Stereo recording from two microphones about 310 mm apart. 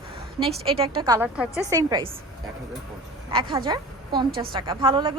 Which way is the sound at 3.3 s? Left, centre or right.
Centre.